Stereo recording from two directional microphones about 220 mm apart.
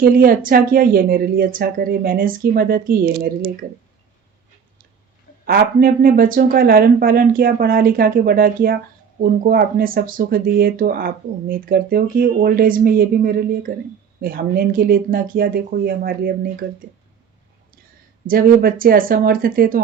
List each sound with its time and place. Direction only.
0.0 s speech: 40° right (ahead or behind)
5.5 s speech: 40° right (ahead or behind)
18.3 s speech: 40° right (ahead or behind)